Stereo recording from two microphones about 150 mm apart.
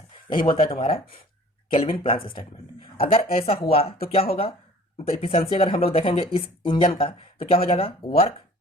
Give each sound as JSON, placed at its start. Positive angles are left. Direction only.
{"t": 0.3, "sound": "speech", "side_deg": 35}